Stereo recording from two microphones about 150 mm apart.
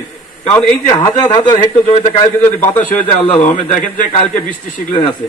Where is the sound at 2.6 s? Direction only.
60° left (ahead or behind).